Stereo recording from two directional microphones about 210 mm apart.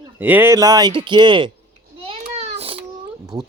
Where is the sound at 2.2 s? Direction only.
30° right (ahead or behind).